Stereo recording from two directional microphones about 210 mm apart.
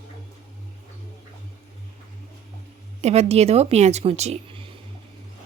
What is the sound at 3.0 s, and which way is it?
Speech, 30° right (ahead or behind).